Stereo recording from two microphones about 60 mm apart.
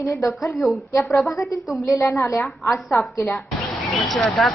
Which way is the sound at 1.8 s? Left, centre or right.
Left.